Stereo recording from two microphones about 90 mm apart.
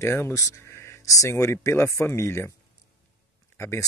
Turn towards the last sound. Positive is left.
turn(degrees=30)  # may be behind; listen again after turning